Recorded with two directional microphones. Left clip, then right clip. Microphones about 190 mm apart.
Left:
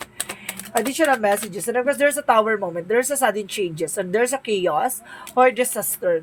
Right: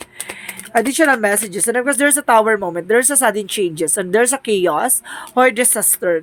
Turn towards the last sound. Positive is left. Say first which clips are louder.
# right 4 dB
turn(degrees=-50)  # may be behind; listen again after turning